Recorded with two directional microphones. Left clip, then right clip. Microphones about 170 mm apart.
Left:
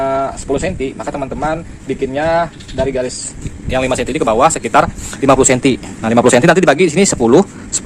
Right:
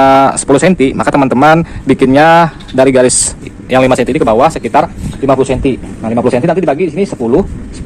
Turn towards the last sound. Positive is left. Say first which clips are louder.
# left 1 dB
turn(degrees=50)  # may be behind; listen again after turning